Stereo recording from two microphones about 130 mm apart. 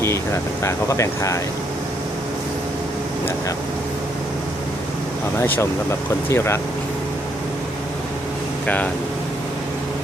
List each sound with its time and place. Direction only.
0.6 s speech: 25° left (ahead or behind)
6.2 s speech: 20° left (ahead or behind)
8.6 s speech: 10° left (ahead or behind)